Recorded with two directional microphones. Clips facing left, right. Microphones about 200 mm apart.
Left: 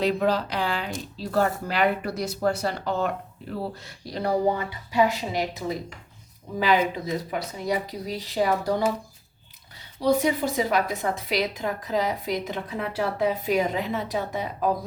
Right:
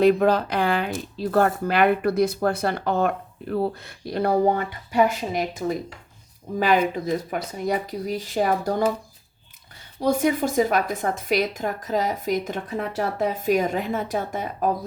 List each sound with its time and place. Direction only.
0.0 s a woman's voice: 50° right (ahead or behind)
10.0 s a woman's voice: 50° right (ahead or behind)